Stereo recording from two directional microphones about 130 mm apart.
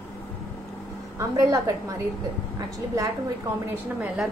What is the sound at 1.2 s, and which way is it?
Speech, 25° right (ahead or behind).